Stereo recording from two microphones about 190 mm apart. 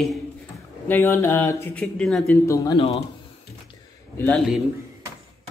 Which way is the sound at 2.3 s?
15° left (ahead or behind).